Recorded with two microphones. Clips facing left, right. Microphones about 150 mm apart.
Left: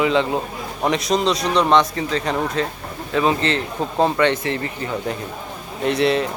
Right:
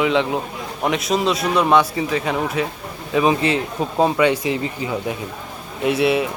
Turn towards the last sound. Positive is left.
turn(degrees=-5)  # may be behind; listen again after turning